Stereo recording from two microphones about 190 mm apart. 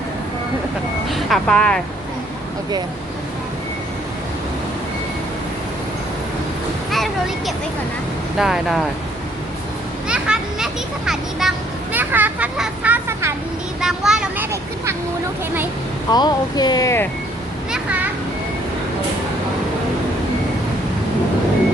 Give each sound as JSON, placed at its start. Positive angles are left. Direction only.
{"t": 1.1, "sound": "speech", "side_deg": 5}
{"t": 6.9, "sound": "a sound", "side_deg": 0}
{"t": 8.4, "sound": "speech", "side_deg": 0}
{"t": 10.1, "sound": "a child's voice", "side_deg": -5}
{"t": 16.0, "sound": "speech", "side_deg": 20}
{"t": 17.7, "sound": "children playing", "side_deg": -10}